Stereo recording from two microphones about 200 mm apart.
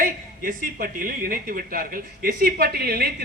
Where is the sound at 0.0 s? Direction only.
45° right (ahead or behind).